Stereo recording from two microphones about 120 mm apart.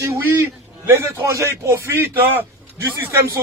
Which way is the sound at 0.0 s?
20° right (ahead or behind).